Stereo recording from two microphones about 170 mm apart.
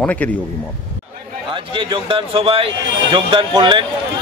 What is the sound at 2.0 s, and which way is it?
A man's voice, 30° right (ahead or behind).